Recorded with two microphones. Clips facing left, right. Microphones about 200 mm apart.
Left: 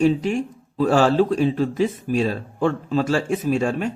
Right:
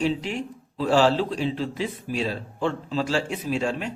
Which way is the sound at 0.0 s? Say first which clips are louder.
Left 7 dB; 45° left (ahead or behind).